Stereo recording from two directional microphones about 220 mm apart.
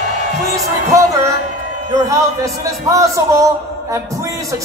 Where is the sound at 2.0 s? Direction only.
15° right (ahead or behind).